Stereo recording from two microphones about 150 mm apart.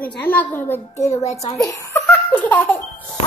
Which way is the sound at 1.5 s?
20° left (ahead or behind).